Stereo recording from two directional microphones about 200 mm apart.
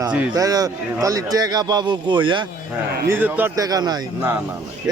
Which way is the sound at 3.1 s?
10° right (ahead or behind).